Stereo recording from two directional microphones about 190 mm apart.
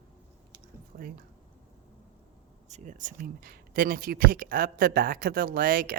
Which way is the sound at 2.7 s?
40° right (ahead or behind).